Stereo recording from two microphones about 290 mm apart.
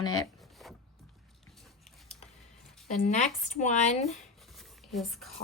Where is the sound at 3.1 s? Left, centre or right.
Left.